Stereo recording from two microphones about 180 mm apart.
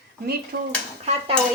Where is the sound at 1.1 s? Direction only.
30° right (ahead or behind).